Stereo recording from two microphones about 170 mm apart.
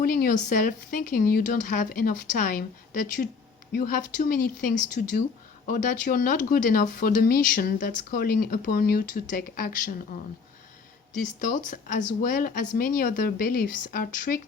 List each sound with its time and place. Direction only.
0.0 s speech: 55° left (ahead or behind)
11.3 s speech: 50° left (ahead or behind)